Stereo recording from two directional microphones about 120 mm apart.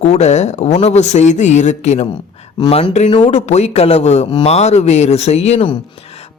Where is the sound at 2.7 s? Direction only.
55° left (ahead or behind).